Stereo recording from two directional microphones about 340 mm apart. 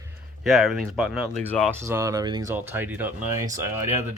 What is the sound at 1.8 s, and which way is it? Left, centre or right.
Speech, centre.